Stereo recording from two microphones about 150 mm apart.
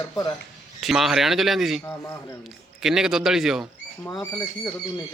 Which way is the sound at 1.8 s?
15° left (ahead or behind).